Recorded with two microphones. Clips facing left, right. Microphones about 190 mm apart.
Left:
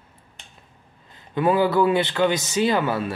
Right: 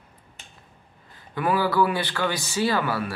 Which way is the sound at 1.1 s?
20° left (ahead or behind).